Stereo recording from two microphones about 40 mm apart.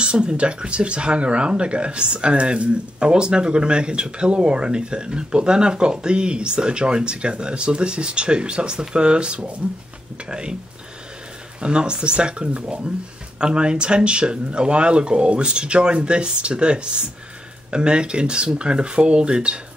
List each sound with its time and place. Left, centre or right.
0.0 s speech: right
11.6 s speech: right